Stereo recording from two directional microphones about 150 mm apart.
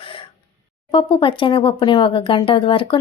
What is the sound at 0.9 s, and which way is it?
Speech, 35° left (ahead or behind).